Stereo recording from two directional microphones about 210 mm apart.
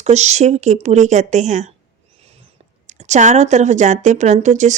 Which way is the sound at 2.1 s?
30° right (ahead or behind).